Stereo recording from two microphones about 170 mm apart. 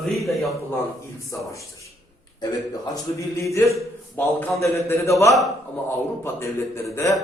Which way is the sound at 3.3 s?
15° left (ahead or behind).